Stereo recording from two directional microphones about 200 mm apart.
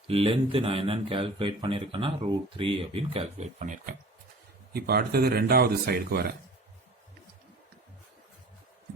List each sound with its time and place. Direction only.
0.1 s speech: 25° right (ahead or behind)
4.7 s a man's voice: 50° right (ahead or behind)